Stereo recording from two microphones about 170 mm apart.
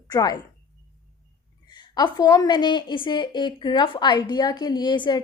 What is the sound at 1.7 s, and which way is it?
A woman's voice, 25° left (ahead or behind).